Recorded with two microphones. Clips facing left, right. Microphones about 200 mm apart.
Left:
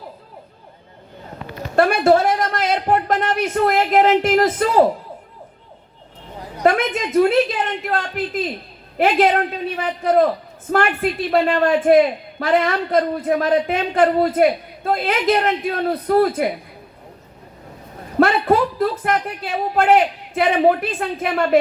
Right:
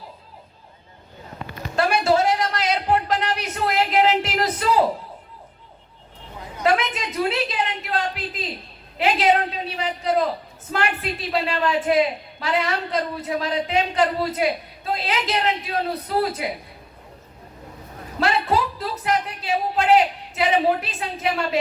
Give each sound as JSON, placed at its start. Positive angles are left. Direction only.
{"t": 1.7, "sound": "a sound", "side_deg": 55}
{"t": 6.6, "sound": "a man's voice", "side_deg": 50}
{"t": 18.2, "sound": "speech", "side_deg": 55}